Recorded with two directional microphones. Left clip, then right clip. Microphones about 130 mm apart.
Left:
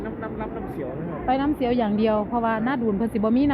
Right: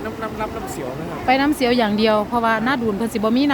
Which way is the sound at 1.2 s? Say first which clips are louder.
Right 6 dB; 50° right (ahead or behind).